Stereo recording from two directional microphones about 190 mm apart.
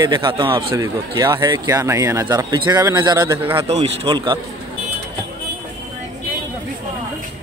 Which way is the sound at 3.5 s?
30° right (ahead or behind).